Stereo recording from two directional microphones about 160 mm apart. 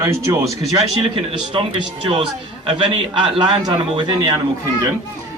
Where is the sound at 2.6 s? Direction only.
35° right (ahead or behind).